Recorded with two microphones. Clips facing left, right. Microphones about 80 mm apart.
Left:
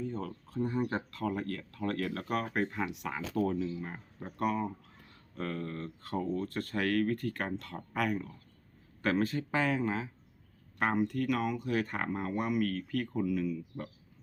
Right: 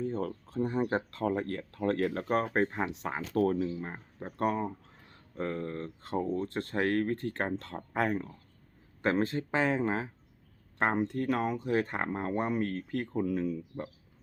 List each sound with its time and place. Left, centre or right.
0.0 s speech: right
0.4 s speech: right
3.3 s speech: right
9.8 s speech: right